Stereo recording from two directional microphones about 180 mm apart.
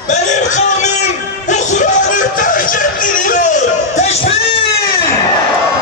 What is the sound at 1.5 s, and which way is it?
Music, 45° left (ahead or behind).